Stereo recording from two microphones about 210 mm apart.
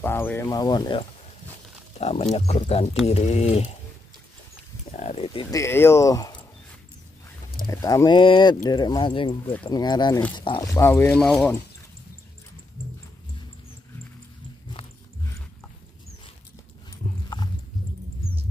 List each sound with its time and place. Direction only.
0.0 s speech: 10° left (ahead or behind); by 3.7 s 30° left (ahead or behind)
4.9 s speech: 30° left (ahead or behind)
5.6 s speech: 10° left (ahead or behind)
7.6 s speech: 15° left (ahead or behind)
10.7 s speech: 10° left (ahead or behind)
14.8 s a sound: 25° left (ahead or behind)
17.0 s dog: 35° left (ahead or behind)